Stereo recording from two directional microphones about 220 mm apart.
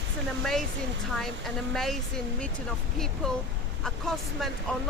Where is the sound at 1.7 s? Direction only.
Centre (ahead or behind).